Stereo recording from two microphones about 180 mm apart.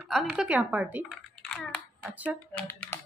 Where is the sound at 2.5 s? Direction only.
10° left (ahead or behind).